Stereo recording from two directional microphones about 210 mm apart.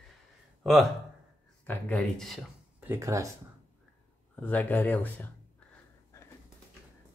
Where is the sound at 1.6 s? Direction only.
10° left (ahead or behind).